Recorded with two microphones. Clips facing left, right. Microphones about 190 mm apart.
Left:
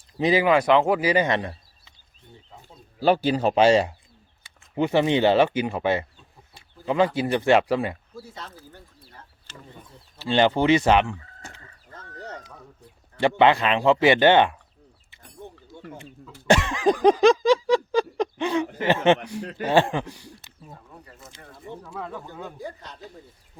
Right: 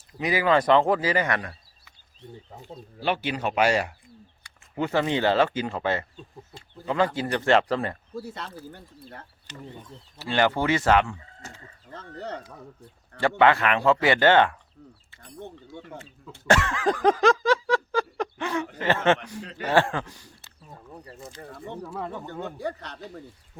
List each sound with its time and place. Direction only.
0.1 s speech: 25° left (ahead or behind)
0.5 s a sound: 5° left (ahead or behind); by 1.9 s 25° left (ahead or behind)
3.0 s speech: 35° left (ahead or behind)
4.7 s a sound: 20° left (ahead or behind)
8.2 s speech: 65° right (ahead or behind)
10.2 s speech: 25° left (ahead or behind)
13.1 s speech: 20° left (ahead or behind)
16.5 s a sound: 15° left (ahead or behind)
19.6 s speech: 20° left (ahead or behind)
21.0 s a sound: 30° right (ahead or behind)
21.8 s speech: centre (ahead or behind)
22.5 s speech: 70° right (ahead or behind)